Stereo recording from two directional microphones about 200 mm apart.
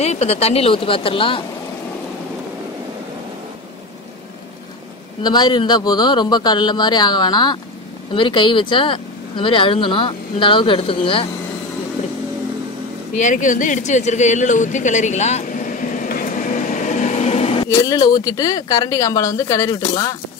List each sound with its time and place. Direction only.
0.0 s speech: 30° left (ahead or behind)
5.2 s speech: 20° left (ahead or behind)
13.1 s a sound: 40° left (ahead or behind)
17.8 s a woman's voice: 20° left (ahead or behind)